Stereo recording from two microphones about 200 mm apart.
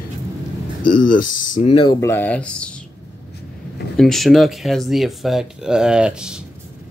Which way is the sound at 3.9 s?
Centre (ahead or behind).